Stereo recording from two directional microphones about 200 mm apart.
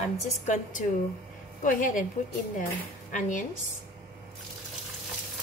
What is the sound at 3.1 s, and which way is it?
Speech, 40° left (ahead or behind).